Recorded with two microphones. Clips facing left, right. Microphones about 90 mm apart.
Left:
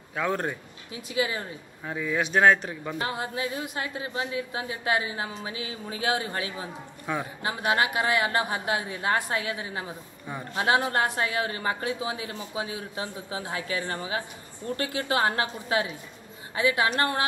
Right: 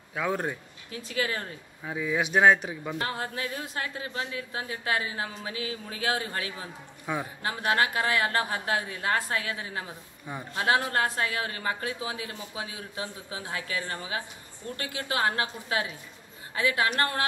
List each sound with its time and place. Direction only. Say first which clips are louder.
0.1 s speech: left 1 dB; 5° right (ahead or behind)
0.9 s speech: left 2 dB; 15° left (ahead or behind)
1.9 s a man's voice: even; 5° right (ahead or behind)
3.0 s a woman's voice: left 3 dB; 15° left (ahead or behind)
7.1 s a man's voice: left 1 dB; 10° right (ahead or behind)
7.4 s a woman's voice: left 1 dB; 20° left (ahead or behind)